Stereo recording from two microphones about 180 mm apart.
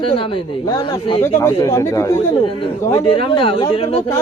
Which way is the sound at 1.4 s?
15° left (ahead or behind).